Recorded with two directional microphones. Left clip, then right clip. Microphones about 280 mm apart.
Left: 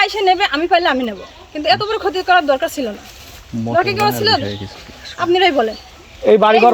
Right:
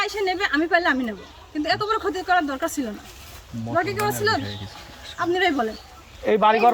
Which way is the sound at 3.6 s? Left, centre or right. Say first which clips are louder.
Left 8 dB; left.